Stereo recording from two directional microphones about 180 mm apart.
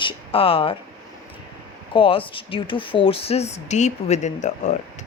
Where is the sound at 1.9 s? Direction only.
30° left (ahead or behind).